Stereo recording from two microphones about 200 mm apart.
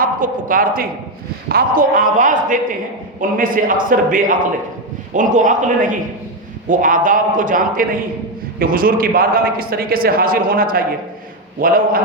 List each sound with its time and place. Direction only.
0.0 s a man's voice: 45° right (ahead or behind)